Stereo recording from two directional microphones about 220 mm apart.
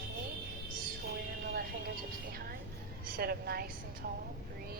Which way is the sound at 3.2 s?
45° right (ahead or behind).